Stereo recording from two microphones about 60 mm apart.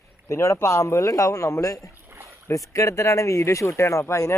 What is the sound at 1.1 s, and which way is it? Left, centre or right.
Speech, left.